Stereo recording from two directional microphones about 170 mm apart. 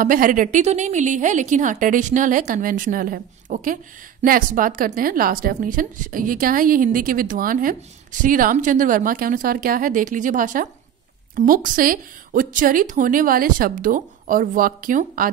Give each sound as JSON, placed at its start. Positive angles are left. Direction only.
{"t": 0.0, "sound": "a woman's voice", "side_deg": -55}